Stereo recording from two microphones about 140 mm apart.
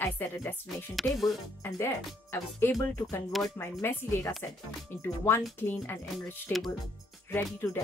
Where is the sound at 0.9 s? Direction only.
Centre (ahead or behind).